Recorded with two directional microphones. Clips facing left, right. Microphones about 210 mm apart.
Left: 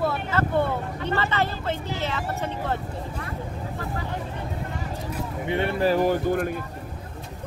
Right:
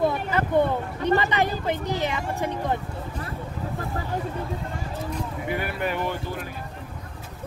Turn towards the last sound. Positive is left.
turn(degrees=50)  # may be behind; listen again after turning